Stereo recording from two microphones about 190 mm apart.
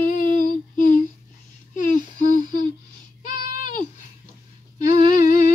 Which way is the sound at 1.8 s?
45° left (ahead or behind).